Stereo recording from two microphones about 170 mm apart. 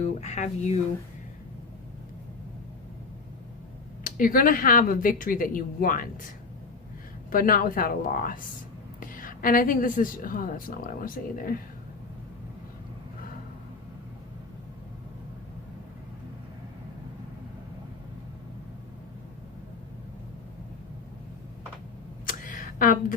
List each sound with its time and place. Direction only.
0.0 s speech: 40° left (ahead or behind)
4.0 s speech: 55° left (ahead or behind)
7.3 s a woman's voice: 55° left (ahead or behind)
22.3 s a sound: 50° left (ahead or behind)